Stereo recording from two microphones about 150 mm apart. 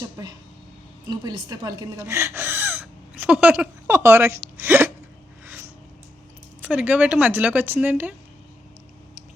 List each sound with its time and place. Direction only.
1.0 s speech: 25° right (ahead or behind)
2.8 s a sound: 5° right (ahead or behind)
6.6 s speech: 10° right (ahead or behind)